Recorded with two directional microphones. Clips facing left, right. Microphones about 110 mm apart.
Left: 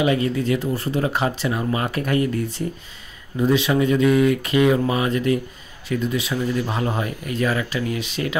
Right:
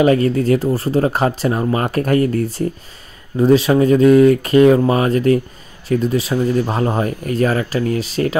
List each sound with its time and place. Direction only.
0.0 s speech: 40° right (ahead or behind)